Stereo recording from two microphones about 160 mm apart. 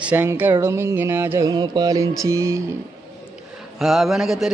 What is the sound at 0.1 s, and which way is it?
Music, 10° right (ahead or behind).